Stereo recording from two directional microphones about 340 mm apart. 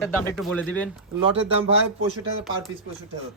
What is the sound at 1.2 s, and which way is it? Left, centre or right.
Speech, centre.